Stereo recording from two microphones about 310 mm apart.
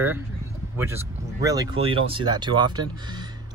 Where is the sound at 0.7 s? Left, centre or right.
Centre.